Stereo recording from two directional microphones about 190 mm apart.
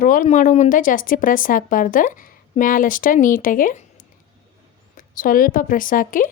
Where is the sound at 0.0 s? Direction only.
40° left (ahead or behind).